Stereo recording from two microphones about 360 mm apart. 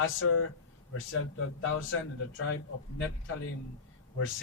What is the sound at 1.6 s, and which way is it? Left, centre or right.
Speech, left.